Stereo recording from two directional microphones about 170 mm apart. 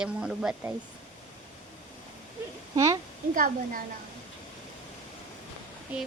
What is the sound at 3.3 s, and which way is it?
Speech, 55° right (ahead or behind).